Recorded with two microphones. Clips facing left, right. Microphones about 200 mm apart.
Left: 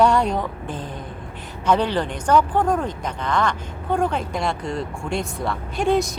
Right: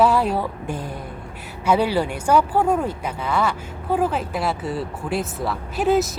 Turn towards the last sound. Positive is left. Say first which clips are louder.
# right 1 dB
turn(degrees=-5)  # may be behind; listen again after turning